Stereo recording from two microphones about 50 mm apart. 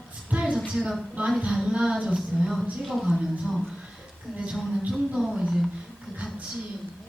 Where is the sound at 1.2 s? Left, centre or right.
Right.